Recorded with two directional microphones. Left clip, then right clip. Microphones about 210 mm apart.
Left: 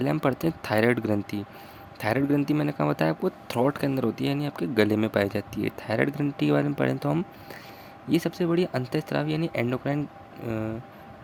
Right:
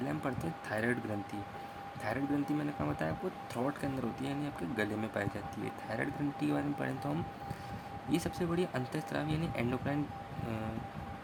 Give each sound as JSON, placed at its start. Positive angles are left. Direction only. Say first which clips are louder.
{"t": 0.0, "sound": "speech", "louder": "left 12 dB", "side_deg": 45}